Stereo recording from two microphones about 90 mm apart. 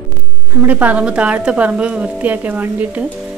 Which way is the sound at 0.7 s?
15° right (ahead or behind).